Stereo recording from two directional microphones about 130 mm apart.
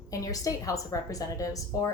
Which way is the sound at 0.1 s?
25° left (ahead or behind).